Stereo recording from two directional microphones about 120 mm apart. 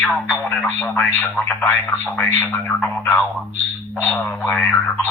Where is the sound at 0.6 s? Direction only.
10° left (ahead or behind).